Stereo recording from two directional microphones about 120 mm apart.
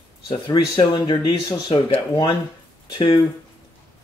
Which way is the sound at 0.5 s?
40° left (ahead or behind).